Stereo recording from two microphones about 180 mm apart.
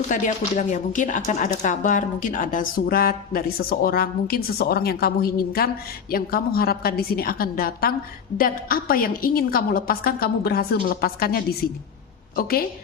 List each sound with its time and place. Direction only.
0.1 s speech: 45° left (ahead or behind)